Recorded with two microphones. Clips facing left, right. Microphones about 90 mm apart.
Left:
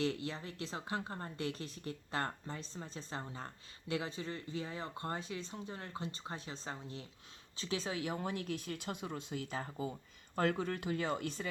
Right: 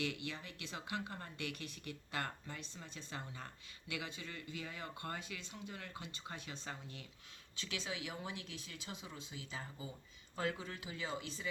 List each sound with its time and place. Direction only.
0.0 s speech: 35° left (ahead or behind); by 11.4 s 55° left (ahead or behind)